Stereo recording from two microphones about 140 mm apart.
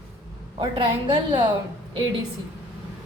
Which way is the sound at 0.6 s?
40° right (ahead or behind).